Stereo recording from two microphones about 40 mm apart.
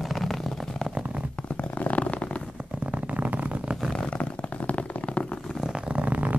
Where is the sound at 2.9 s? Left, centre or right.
Right.